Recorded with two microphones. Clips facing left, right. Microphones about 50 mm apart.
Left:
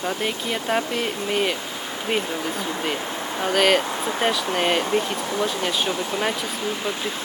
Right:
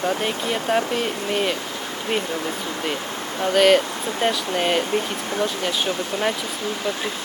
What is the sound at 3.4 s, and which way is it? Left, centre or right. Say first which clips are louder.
Speech: right 3 dB; centre.